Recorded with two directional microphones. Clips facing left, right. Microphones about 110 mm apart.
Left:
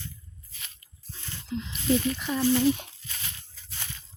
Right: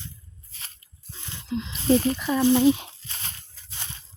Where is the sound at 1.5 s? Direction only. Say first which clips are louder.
Right 4 dB; 90° right.